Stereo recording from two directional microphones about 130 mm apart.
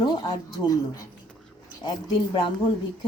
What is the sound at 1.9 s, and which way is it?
Speech, 40° left (ahead or behind).